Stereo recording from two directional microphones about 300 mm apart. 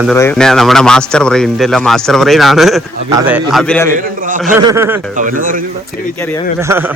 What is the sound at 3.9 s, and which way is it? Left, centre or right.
Speech, right.